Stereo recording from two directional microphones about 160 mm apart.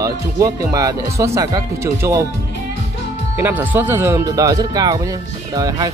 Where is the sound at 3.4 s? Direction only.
10° right (ahead or behind).